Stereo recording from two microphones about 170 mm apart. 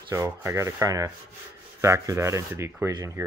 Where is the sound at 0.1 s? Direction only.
15° right (ahead or behind).